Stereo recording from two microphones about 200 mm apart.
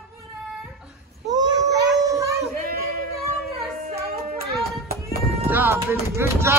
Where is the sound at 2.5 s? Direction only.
45° right (ahead or behind).